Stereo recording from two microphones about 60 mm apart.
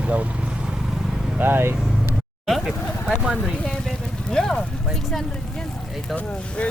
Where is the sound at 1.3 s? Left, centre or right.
Right.